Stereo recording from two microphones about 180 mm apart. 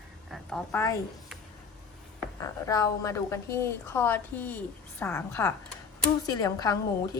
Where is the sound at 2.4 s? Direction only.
20° left (ahead or behind).